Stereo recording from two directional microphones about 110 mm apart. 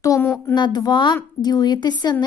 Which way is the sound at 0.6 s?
40° left (ahead or behind).